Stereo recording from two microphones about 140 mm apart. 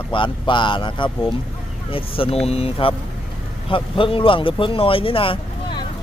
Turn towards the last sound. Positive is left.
turn(degrees=40)  # may be behind; listen again after turning